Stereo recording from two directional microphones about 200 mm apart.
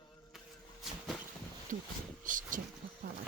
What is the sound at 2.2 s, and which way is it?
Speech, 40° right (ahead or behind).